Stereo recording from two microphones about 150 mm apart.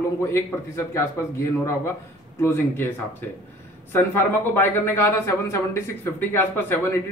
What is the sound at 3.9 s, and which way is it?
Speech, 15° left (ahead or behind).